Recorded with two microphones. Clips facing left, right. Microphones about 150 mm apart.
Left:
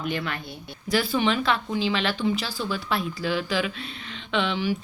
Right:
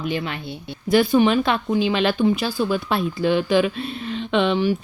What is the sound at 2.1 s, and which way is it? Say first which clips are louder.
Speech: right 7 dB; 55° right (ahead or behind).